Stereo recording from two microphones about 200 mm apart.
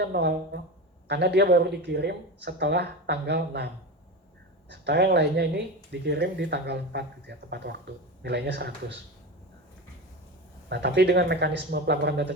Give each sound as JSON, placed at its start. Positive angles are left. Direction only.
{"t": 0.0, "sound": "speech", "side_deg": -55}
{"t": 4.7, "sound": "speech", "side_deg": -60}
{"t": 10.7, "sound": "speech", "side_deg": -55}